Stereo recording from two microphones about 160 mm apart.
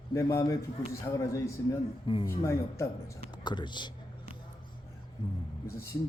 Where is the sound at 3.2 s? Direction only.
30° left (ahead or behind).